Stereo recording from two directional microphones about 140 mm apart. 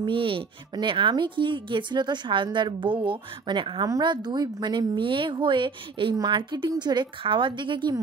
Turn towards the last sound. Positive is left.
turn(degrees=-35)  # may be behind; listen again after turning